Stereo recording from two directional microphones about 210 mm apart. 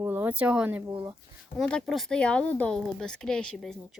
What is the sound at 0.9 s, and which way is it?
Speech, 20° right (ahead or behind).